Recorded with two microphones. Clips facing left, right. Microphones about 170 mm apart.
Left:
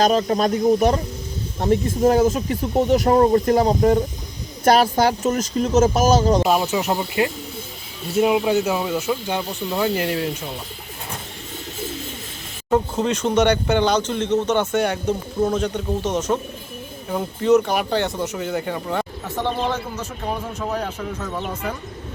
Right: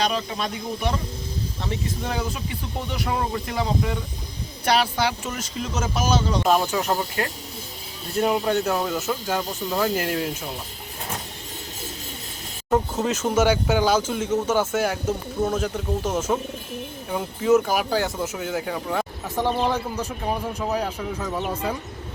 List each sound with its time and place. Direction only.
0.0 s speech: 45° left (ahead or behind)
6.4 s speech: 5° left (ahead or behind)
12.7 s a man's voice: centre (ahead or behind)